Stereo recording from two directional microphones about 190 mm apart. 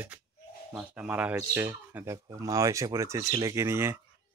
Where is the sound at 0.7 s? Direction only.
5° right (ahead or behind).